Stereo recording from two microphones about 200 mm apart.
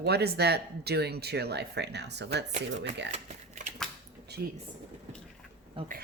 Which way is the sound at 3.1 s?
35° right (ahead or behind).